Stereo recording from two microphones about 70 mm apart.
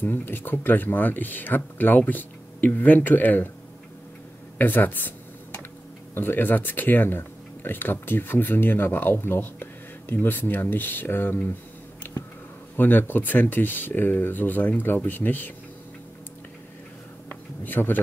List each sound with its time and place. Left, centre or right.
0.0 s speech: left
4.6 s computer keyboard: left
6.1 s speech: left
12.7 s speech: left
17.3 s a sound: left